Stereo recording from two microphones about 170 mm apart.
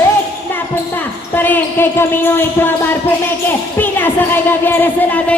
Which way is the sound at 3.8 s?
10° left (ahead or behind).